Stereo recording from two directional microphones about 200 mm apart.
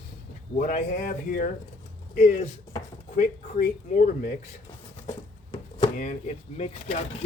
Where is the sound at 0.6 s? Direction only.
40° left (ahead or behind).